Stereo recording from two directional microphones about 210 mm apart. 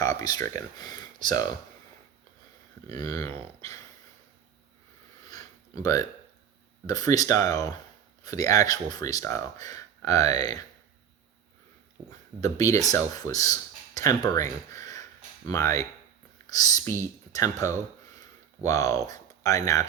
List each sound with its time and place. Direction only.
0.0 s speech: 15° left (ahead or behind)
2.9 s speech: 15° left (ahead or behind)
5.3 s a sound: 15° left (ahead or behind)
6.8 s speech: 15° left (ahead or behind)
12.4 s speech: 15° left (ahead or behind)
18.2 s a sound: 15° left (ahead or behind)